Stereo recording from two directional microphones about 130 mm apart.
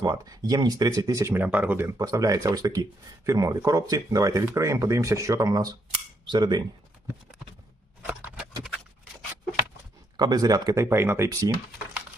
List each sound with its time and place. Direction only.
0.0 s speech: 30° right (ahead or behind)
8.0 s horse: 10° right (ahead or behind)
10.2 s speech: 30° right (ahead or behind)